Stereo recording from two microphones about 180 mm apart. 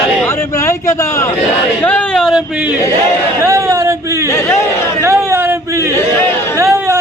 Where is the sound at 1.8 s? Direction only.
5° left (ahead or behind).